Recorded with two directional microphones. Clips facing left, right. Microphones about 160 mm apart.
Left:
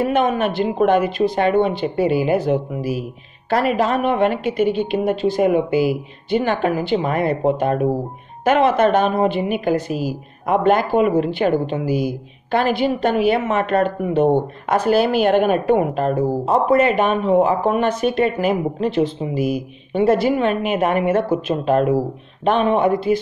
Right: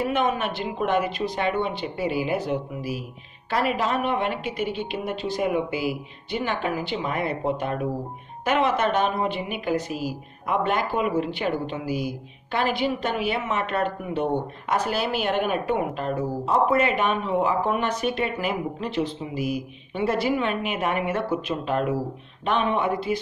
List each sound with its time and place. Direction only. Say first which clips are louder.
0.0 s a woman's voice: left 6 dB; 50° left (ahead or behind)